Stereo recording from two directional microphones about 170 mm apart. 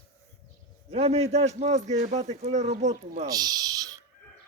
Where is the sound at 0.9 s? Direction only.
40° right (ahead or behind).